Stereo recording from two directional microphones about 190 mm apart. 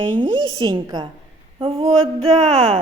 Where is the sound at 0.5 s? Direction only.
25° right (ahead or behind).